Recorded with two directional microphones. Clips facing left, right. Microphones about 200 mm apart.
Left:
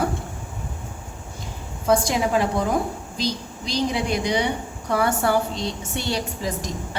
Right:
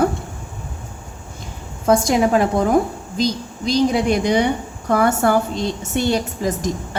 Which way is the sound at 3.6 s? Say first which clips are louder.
Right 7 dB; 50° right (ahead or behind).